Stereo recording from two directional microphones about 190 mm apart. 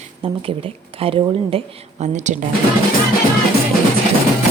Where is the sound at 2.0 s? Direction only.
40° right (ahead or behind).